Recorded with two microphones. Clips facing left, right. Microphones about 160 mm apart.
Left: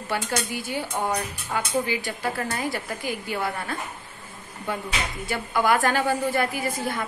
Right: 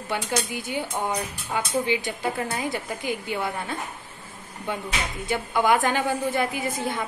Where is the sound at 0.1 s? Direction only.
20° right (ahead or behind).